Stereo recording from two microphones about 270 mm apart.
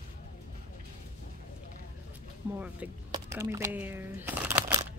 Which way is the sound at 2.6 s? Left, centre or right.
Centre.